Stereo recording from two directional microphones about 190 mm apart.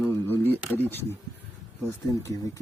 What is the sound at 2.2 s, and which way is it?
Speech, 15° left (ahead or behind).